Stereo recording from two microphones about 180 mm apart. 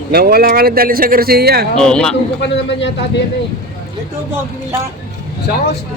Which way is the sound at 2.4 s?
75° left (ahead or behind).